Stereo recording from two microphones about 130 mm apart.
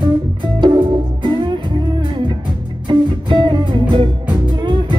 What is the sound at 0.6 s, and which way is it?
Music, 35° right (ahead or behind).